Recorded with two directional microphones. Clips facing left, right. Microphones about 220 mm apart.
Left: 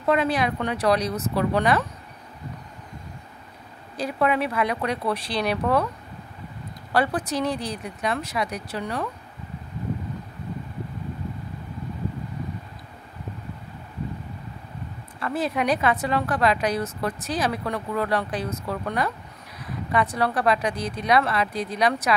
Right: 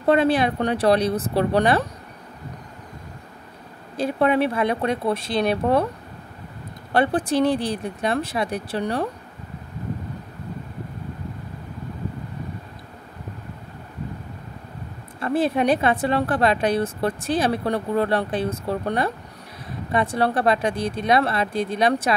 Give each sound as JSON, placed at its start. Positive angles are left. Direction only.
{"t": 0.0, "sound": "speech", "side_deg": -30}
{"t": 3.9, "sound": "a woman's voice", "side_deg": -25}
{"t": 6.9, "sound": "a woman's voice", "side_deg": -25}
{"t": 15.1, "sound": "a woman's voice", "side_deg": -30}